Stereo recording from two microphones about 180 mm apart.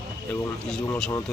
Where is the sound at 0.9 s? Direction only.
10° left (ahead or behind).